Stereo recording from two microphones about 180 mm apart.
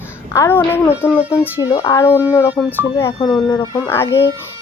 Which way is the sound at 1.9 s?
15° left (ahead or behind).